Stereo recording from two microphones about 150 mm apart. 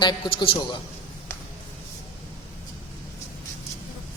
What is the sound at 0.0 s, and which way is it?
Speech, 30° left (ahead or behind).